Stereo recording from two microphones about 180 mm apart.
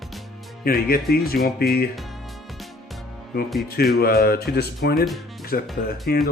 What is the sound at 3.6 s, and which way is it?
Speech, 60° left (ahead or behind).